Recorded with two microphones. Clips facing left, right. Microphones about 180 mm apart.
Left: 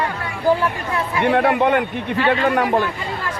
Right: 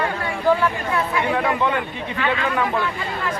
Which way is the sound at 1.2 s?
60° left (ahead or behind).